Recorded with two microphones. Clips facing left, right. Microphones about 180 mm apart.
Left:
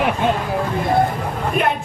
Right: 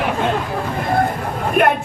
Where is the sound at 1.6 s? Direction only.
55° right (ahead or behind).